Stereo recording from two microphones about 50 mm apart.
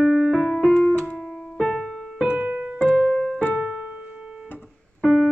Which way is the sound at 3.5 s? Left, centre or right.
Centre.